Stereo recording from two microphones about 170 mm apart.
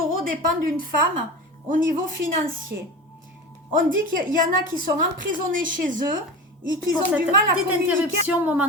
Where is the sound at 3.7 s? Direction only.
55° right (ahead or behind).